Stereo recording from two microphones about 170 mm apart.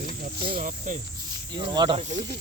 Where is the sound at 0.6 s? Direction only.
50° right (ahead or behind).